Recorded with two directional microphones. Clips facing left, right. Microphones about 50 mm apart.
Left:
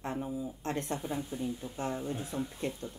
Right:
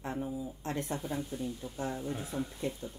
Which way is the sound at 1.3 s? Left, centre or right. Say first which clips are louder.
Left 1 dB; left.